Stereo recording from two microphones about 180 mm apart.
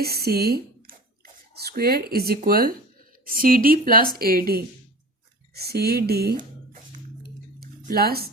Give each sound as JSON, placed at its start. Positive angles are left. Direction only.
{"t": 0.0, "sound": "a woman's voice", "side_deg": -60}
{"t": 7.8, "sound": "speech", "side_deg": -55}